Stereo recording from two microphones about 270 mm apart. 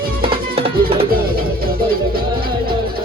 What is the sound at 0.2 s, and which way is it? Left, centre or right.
Music, right.